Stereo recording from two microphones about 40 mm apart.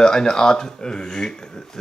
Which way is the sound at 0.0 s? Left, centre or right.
Centre.